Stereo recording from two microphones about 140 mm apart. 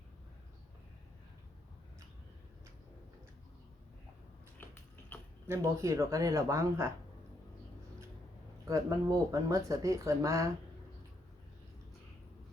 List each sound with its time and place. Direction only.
4.5 s a sound: 15° left (ahead or behind)
5.5 s speech: 20° right (ahead or behind)
8.6 s speech: 25° right (ahead or behind)